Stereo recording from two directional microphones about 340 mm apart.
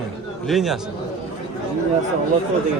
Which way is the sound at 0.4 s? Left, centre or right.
Centre.